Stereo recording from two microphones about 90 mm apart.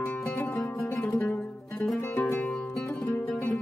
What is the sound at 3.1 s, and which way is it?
Music, 20° left (ahead or behind).